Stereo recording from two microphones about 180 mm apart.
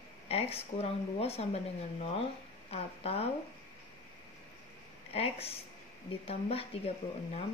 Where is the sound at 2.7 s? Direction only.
35° left (ahead or behind).